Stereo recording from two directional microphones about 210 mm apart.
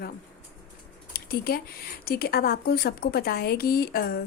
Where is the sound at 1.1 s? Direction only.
45° left (ahead or behind).